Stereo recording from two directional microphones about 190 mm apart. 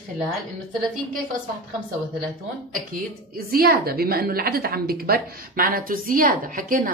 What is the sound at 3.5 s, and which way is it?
A woman's voice, 55° right (ahead or behind).